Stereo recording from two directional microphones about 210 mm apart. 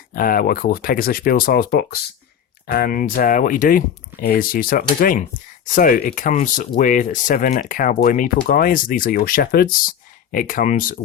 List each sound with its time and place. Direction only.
0.1 s speech: 45° left (ahead or behind)